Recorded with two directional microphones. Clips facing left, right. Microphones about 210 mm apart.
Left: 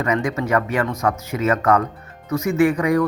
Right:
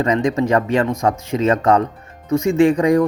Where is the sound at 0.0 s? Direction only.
30° right (ahead or behind).